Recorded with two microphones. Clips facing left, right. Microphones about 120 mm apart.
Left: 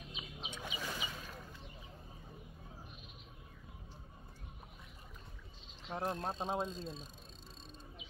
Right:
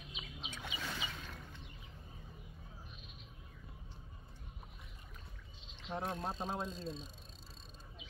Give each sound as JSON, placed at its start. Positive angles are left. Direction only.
{"t": 0.4, "sound": "a sound", "side_deg": 20}
{"t": 5.9, "sound": "speech", "side_deg": 5}
{"t": 6.3, "sound": "speech", "side_deg": 30}
{"t": 6.7, "sound": "speech", "side_deg": 0}